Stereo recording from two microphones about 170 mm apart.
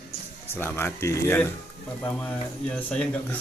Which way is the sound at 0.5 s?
15° left (ahead or behind).